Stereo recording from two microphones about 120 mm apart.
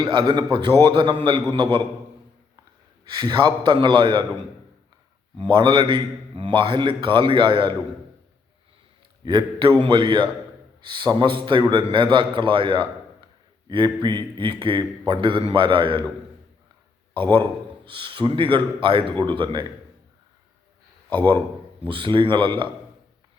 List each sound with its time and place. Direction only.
0.0 s a man's voice: 40° right (ahead or behind)
3.0 s a man's voice: 35° right (ahead or behind)
5.4 s a man's voice: 45° right (ahead or behind)
9.2 s a man's voice: 40° right (ahead or behind)
17.9 s a man's voice: 45° right (ahead or behind)
21.8 s a man's voice: 45° right (ahead or behind)